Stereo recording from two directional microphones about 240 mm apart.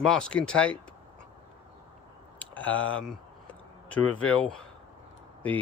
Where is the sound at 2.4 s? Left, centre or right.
Centre.